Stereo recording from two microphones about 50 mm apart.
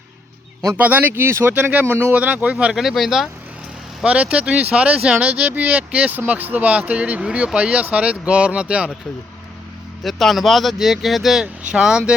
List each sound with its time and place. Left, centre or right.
0.8 s speech: right
2.1 s speech: right
2.7 s speech: centre
4.0 s speech: right
10.0 s speech: centre
11.3 s speech: centre